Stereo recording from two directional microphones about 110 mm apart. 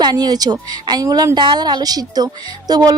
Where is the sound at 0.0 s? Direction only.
40° right (ahead or behind).